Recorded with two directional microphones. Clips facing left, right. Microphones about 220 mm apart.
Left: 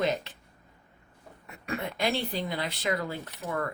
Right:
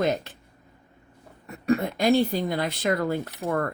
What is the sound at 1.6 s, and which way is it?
Speech, 40° right (ahead or behind).